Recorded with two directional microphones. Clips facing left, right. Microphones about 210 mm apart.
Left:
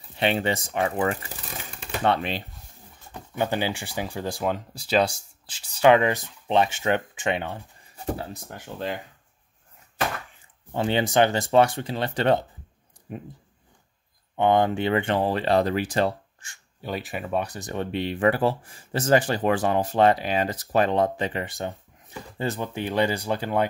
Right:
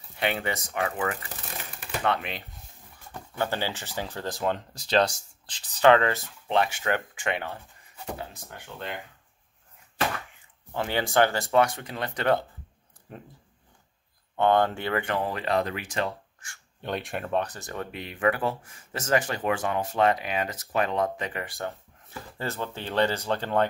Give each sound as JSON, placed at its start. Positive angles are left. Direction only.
{"t": 0.1, "sound": "speech", "side_deg": 25}
{"t": 3.1, "sound": "speech", "side_deg": 15}
{"t": 8.0, "sound": "speech", "side_deg": 40}
{"t": 10.7, "sound": "speech", "side_deg": 25}
{"t": 13.1, "sound": "speech", "side_deg": 15}
{"t": 14.3, "sound": "speech", "side_deg": 15}
{"t": 16.8, "sound": "speech", "side_deg": 5}
{"t": 17.9, "sound": "speech", "side_deg": 30}